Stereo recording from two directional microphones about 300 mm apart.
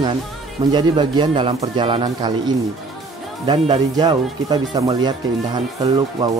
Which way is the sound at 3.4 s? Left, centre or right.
Centre.